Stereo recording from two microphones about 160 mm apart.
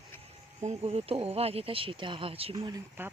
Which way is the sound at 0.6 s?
40° right (ahead or behind).